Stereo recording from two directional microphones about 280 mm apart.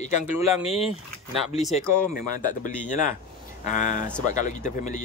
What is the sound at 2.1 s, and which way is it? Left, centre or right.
Speech, left.